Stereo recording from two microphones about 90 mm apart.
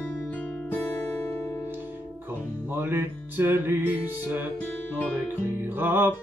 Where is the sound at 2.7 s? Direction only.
25° right (ahead or behind).